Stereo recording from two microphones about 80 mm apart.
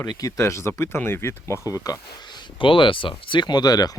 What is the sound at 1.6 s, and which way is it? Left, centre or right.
Speech, left.